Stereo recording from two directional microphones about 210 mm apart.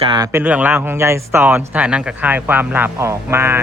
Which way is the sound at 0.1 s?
15° right (ahead or behind).